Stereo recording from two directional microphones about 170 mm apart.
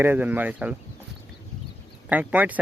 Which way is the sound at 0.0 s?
10° right (ahead or behind).